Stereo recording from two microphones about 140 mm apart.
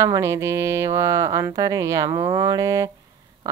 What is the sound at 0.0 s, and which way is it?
A woman's voice, 25° right (ahead or behind).